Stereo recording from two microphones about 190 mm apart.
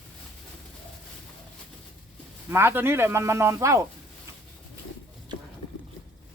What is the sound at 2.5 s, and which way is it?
Speech, 10° right (ahead or behind).